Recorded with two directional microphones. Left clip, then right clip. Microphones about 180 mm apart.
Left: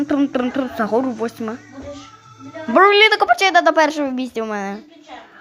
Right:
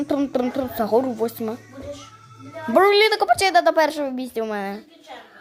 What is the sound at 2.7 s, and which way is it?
Speech, centre (ahead or behind).